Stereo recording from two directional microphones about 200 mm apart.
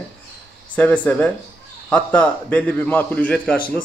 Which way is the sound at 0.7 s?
10° left (ahead or behind).